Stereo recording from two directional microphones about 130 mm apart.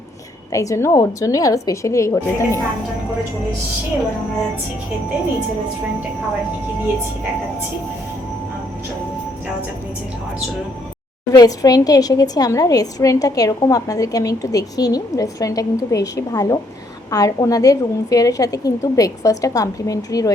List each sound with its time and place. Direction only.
0.5 s a woman's voice: 25° left (ahead or behind)
11.3 s a woman's voice: 30° left (ahead or behind)